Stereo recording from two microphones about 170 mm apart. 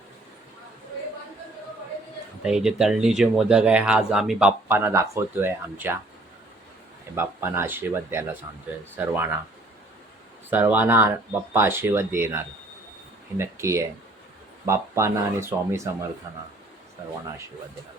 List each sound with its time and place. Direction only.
2.4 s speech: 5° right (ahead or behind)
7.2 s speech: 15° right (ahead or behind)
10.5 s speech: 10° right (ahead or behind)